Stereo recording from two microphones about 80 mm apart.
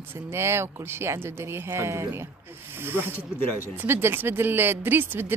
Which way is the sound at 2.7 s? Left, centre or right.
Right.